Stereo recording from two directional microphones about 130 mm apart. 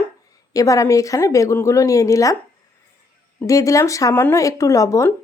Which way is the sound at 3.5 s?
25° left (ahead or behind).